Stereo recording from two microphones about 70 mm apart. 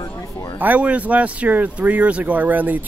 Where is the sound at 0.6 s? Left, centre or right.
Right.